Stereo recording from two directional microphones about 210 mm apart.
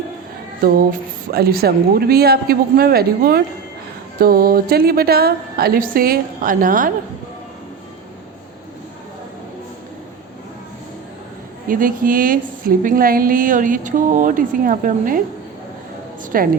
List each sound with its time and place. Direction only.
1.3 s a woman's voice: 45° right (ahead or behind)
11.7 s speech: 40° right (ahead or behind)
16.3 s a woman's voice: 45° right (ahead or behind)